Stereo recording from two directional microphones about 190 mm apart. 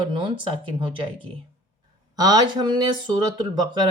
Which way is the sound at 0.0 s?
25° right (ahead or behind).